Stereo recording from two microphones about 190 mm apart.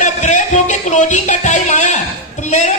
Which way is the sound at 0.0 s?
40° left (ahead or behind).